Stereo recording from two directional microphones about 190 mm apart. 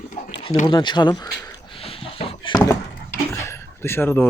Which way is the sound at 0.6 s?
20° left (ahead or behind).